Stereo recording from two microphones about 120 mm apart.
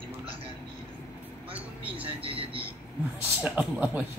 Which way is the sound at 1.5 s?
10° right (ahead or behind).